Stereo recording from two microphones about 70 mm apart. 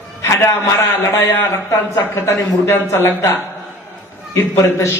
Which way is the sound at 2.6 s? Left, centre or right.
Left.